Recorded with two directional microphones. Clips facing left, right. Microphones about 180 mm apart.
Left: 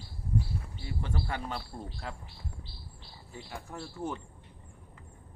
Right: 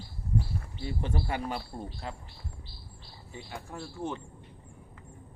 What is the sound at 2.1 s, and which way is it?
Speech, centre (ahead or behind).